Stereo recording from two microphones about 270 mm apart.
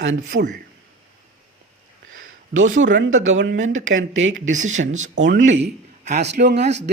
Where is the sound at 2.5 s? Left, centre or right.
Right.